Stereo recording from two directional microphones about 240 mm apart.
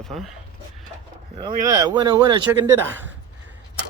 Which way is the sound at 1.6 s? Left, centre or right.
Centre.